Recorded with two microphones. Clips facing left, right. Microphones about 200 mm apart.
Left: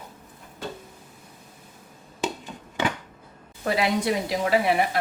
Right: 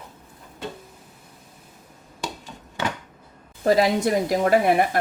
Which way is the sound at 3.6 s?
40° right (ahead or behind).